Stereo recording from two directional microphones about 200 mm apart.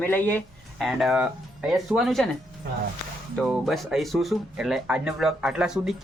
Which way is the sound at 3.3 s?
Centre (ahead or behind).